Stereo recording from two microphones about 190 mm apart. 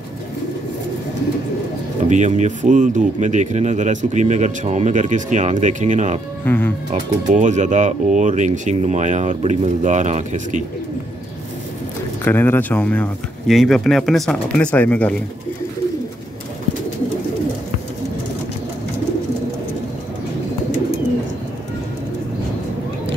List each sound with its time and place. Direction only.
2.0 s speech: 40° right (ahead or behind)
6.4 s speech: 10° left (ahead or behind)
6.9 s speech: 40° right (ahead or behind)
12.3 s speech: 10° left (ahead or behind)